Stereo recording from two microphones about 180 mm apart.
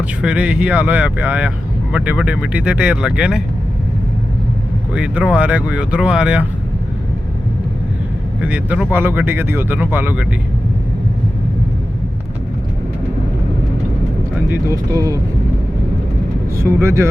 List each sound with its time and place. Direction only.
0.2 s speech: 5° right (ahead or behind)
4.9 s speech: 5° right (ahead or behind)
8.4 s speech: 5° right (ahead or behind)
14.7 s speech: 20° right (ahead or behind)
16.6 s speech: 15° right (ahead or behind)